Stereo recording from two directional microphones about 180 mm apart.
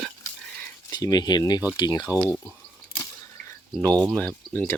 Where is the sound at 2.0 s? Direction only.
10° right (ahead or behind).